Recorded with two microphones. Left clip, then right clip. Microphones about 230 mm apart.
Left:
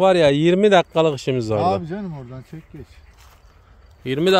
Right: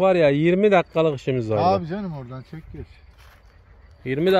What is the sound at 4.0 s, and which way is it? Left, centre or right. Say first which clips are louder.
Speech: left 2 dB; centre.